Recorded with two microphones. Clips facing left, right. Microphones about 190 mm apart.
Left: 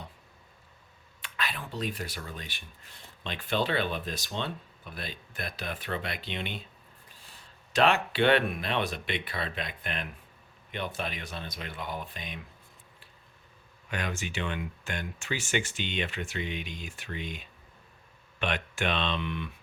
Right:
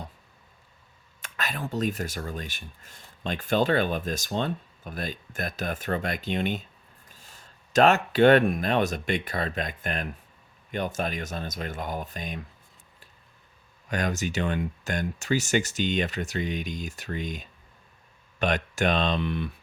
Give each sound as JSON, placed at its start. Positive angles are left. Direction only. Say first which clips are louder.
{"t": 1.2, "sound": "speech", "louder": "right 4 dB", "side_deg": -45}
{"t": 13.8, "sound": "speech", "louder": "right 6 dB", "side_deg": -40}